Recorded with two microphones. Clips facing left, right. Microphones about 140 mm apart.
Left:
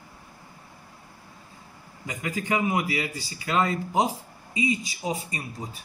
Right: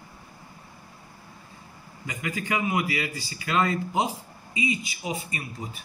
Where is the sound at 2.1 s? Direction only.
40° left (ahead or behind).